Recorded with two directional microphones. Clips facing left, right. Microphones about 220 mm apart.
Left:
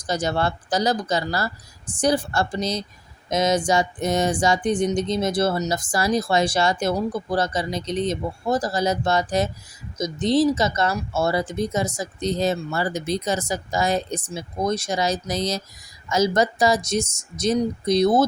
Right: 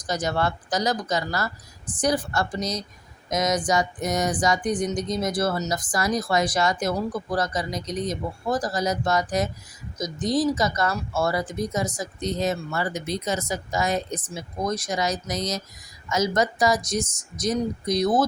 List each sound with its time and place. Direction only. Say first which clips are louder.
0.0 s speech: left 2 dB; 30° left (ahead or behind)